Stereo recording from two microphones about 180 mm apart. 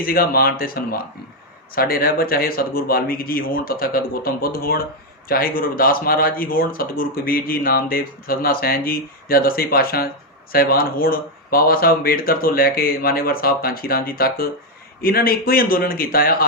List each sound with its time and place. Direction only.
0.0 s speech: 55° left (ahead or behind)